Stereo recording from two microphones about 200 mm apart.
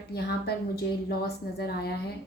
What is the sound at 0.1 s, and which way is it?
A woman's voice, 55° left (ahead or behind).